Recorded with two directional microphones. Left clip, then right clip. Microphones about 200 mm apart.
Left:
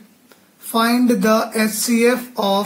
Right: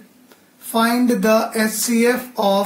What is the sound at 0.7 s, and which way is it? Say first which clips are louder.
Speech: left 1 dB; 20° left (ahead or behind).